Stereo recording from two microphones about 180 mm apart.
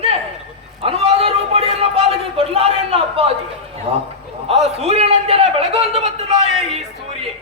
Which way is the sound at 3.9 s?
35° right (ahead or behind).